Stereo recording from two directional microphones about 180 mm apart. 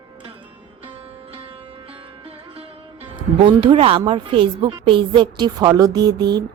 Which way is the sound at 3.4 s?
25° right (ahead or behind).